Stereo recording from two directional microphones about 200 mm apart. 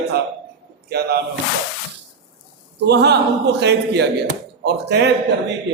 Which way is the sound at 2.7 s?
55° right (ahead or behind).